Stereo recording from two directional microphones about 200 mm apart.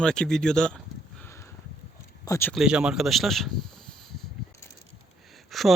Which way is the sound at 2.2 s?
15° left (ahead or behind).